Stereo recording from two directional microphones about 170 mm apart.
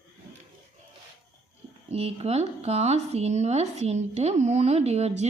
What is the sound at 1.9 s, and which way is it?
Speech, 35° right (ahead or behind).